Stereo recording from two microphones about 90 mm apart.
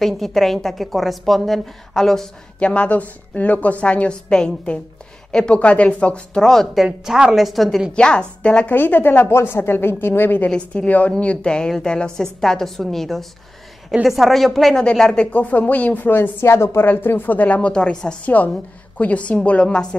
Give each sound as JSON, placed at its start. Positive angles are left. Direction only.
{"t": 0.0, "sound": "a woman's voice", "side_deg": 5}
{"t": 10.5, "sound": "a woman's voice", "side_deg": 10}